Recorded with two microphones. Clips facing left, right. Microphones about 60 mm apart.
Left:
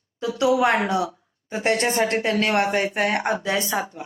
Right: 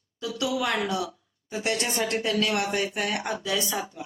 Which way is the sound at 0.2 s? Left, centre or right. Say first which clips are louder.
Left 8 dB; left.